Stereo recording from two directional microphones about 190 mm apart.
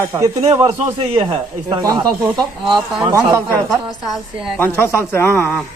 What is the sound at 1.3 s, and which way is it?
Speech, 20° right (ahead or behind).